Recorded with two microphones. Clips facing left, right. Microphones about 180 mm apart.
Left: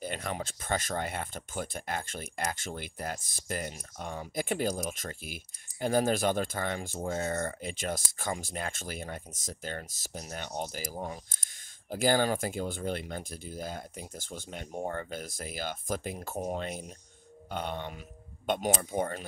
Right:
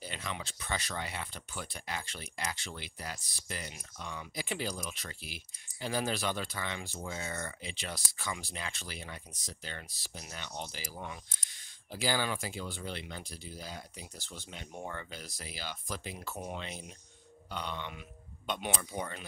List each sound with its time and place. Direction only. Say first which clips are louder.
0.0 s speech: left 6 dB; 50° left (ahead or behind)